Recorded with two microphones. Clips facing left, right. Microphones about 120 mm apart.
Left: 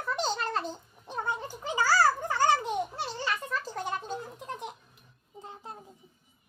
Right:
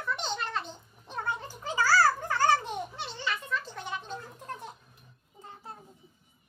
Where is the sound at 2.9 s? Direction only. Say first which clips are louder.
Left 2 dB; 40° left (ahead or behind).